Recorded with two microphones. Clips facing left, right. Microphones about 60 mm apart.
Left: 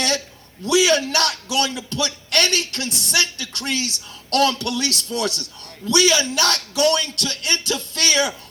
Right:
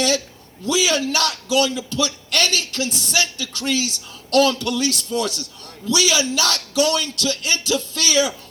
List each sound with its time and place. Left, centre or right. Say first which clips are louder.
0.6 s a man's voice: left 3 dB; left